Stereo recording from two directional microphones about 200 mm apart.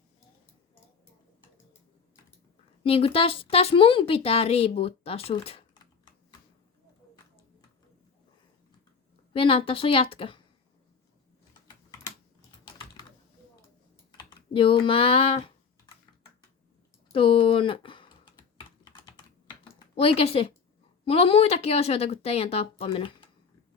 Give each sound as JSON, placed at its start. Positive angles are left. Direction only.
{"t": 2.8, "sound": "speech", "side_deg": 30}
{"t": 9.3, "sound": "speech", "side_deg": 25}
{"t": 12.6, "sound": "typing", "side_deg": 20}
{"t": 14.2, "sound": "speech", "side_deg": 25}
{"t": 17.1, "sound": "typing", "side_deg": 25}
{"t": 19.6, "sound": "speech", "side_deg": 30}